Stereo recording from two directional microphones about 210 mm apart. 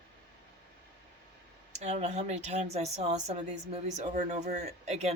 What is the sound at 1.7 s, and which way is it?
Speech, 35° right (ahead or behind).